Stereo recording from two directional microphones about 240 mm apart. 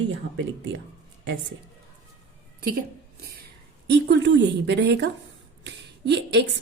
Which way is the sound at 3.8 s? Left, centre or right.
Right.